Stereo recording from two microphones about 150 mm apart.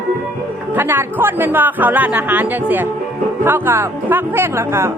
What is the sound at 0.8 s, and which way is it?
Speech, 15° right (ahead or behind).